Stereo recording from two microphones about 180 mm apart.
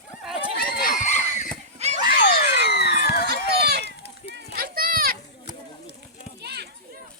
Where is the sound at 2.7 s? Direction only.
65° left (ahead or behind).